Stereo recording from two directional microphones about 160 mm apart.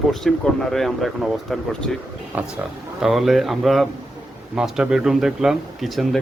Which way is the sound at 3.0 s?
Centre (ahead or behind).